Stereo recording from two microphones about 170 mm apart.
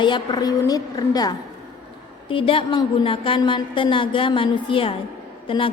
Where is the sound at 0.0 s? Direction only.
25° left (ahead or behind).